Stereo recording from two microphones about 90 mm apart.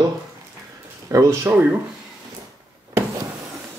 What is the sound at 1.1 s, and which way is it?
Speech, 35° right (ahead or behind).